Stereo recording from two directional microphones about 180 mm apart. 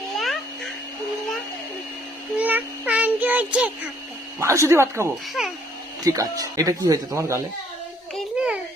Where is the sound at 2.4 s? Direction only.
10° right (ahead or behind).